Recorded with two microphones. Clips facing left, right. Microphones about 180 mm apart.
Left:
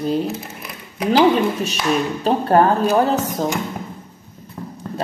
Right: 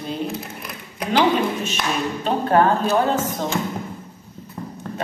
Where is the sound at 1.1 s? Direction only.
35° left (ahead or behind).